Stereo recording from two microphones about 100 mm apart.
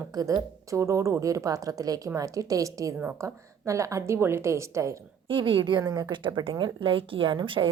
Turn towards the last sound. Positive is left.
turn(degrees=-55)  # may be behind; listen again after turning